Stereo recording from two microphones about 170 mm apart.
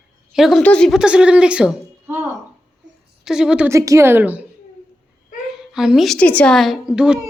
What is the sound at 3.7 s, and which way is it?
Speech, 20° right (ahead or behind).